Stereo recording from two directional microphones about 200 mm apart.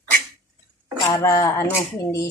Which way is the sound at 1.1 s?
15° left (ahead or behind).